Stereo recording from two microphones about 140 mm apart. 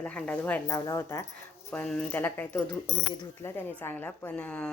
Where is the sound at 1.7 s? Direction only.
10° left (ahead or behind).